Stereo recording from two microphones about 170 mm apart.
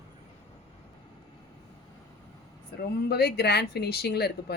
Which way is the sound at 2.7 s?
70° left (ahead or behind).